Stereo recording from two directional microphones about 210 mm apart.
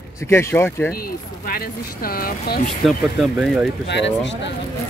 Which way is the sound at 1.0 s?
45° left (ahead or behind).